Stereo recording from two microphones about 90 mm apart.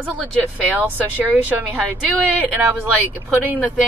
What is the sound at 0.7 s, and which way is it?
Speech, 20° right (ahead or behind).